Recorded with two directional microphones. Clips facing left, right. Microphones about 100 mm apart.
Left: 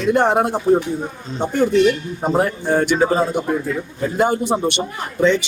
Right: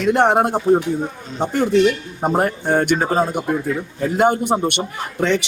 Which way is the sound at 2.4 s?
50° right (ahead or behind).